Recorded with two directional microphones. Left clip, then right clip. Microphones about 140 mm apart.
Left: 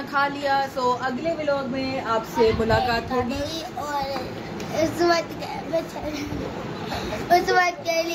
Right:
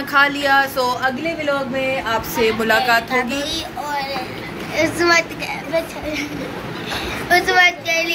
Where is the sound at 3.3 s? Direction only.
40° left (ahead or behind).